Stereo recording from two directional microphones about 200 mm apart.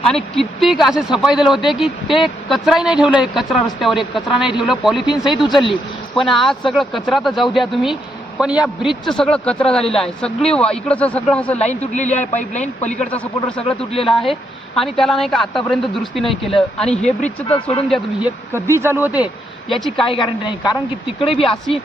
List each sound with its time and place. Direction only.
0.3 s speech: centre (ahead or behind)
11.6 s speech: 35° left (ahead or behind)
13.0 s speech: 5° left (ahead or behind)
13.7 s a woman's voice: 30° left (ahead or behind)
14.1 s speech: centre (ahead or behind)
17.5 s a woman's voice: 30° left (ahead or behind)
17.8 s speech: centre (ahead or behind)
18.5 s speech: 10° right (ahead or behind)
20.1 s a woman's voice: 25° left (ahead or behind)